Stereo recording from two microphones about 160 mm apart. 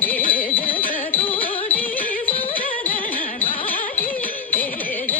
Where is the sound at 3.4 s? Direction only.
35° left (ahead or behind).